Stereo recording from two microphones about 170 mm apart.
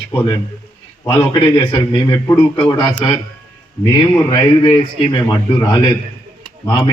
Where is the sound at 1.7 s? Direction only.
25° left (ahead or behind).